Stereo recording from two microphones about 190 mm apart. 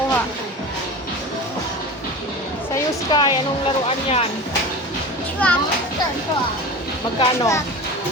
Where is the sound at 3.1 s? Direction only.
20° left (ahead or behind).